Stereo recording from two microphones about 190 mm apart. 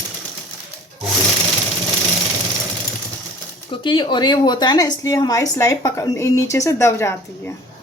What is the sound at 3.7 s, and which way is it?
A woman's voice, 25° left (ahead or behind).